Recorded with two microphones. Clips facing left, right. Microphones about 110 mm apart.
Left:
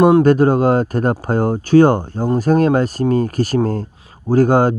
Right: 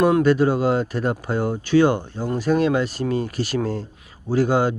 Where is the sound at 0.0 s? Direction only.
35° left (ahead or behind).